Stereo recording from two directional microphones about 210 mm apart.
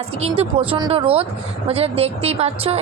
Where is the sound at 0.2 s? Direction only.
25° right (ahead or behind).